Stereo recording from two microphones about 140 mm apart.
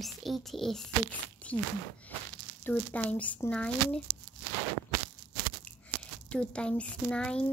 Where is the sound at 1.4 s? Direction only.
10° left (ahead or behind).